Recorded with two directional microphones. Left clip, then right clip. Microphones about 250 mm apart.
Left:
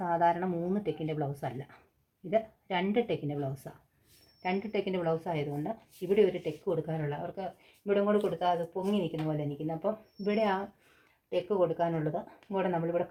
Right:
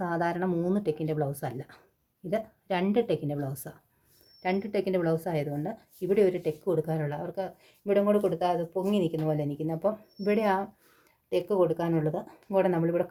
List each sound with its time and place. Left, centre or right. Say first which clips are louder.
0.0 s speech: left 1 dB; right